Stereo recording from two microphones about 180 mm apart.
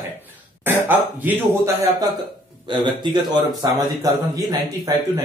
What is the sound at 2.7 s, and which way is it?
Speech, 25° right (ahead or behind).